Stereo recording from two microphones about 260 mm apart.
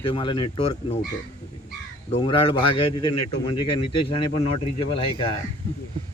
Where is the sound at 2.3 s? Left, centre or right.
Centre.